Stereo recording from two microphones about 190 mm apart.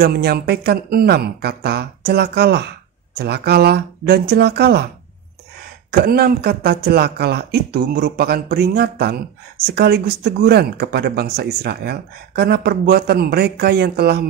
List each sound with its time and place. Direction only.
0.0 s speech: 55° right (ahead or behind)
5.9 s speech: 55° right (ahead or behind)